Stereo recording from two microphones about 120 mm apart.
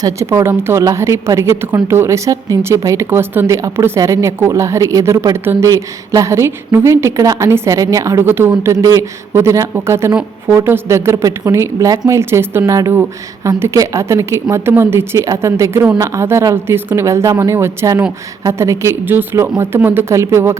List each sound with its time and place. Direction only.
0.0 s a woman's voice: 25° right (ahead or behind)